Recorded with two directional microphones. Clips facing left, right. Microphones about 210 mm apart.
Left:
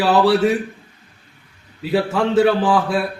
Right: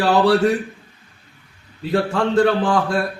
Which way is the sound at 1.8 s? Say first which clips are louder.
Left 1 dB; 5° left (ahead or behind).